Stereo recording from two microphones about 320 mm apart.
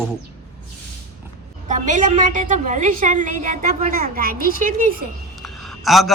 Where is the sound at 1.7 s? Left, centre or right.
Right.